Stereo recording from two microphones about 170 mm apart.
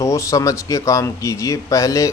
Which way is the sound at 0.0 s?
15° left (ahead or behind).